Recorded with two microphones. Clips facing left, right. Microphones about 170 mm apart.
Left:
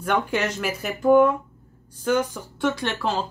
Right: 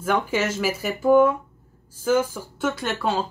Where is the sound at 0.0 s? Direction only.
Centre (ahead or behind).